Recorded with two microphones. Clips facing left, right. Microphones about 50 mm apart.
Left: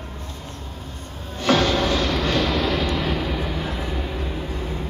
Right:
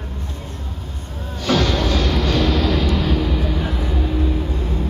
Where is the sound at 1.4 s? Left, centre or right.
Left.